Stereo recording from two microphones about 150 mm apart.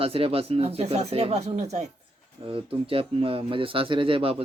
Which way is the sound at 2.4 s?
35° right (ahead or behind).